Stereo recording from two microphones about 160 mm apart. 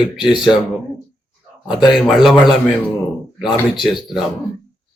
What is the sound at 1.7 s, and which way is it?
Speech, 5° right (ahead or behind).